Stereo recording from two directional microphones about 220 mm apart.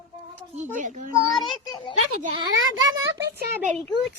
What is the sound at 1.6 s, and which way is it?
Speech, 20° left (ahead or behind).